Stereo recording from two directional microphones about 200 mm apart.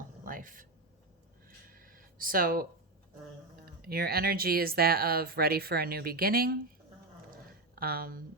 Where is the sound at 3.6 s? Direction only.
50° right (ahead or behind).